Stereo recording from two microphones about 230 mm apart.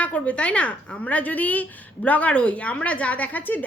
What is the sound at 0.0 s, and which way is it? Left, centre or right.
A woman's voice, centre.